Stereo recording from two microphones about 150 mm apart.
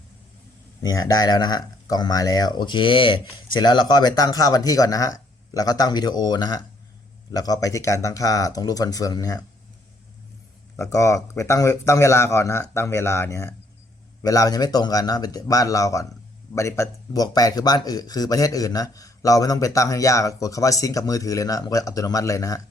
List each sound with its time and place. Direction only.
0.8 s a man's voice: 25° left (ahead or behind)
10.8 s a man's voice: 20° left (ahead or behind)